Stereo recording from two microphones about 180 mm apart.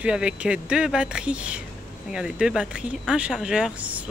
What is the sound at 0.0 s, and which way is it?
Speech, 5° right (ahead or behind).